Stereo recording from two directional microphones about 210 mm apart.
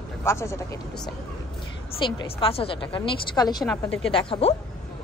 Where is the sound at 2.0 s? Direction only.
20° left (ahead or behind).